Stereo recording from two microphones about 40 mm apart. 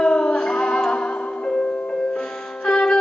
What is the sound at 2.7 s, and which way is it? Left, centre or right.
Music, centre.